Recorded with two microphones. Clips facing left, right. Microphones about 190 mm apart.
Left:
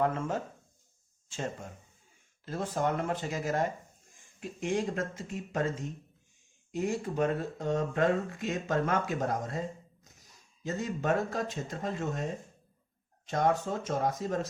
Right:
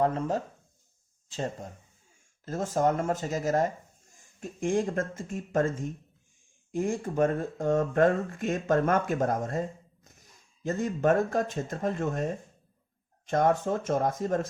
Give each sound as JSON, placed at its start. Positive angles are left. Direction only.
{"t": 0.0, "sound": "speech", "side_deg": -35}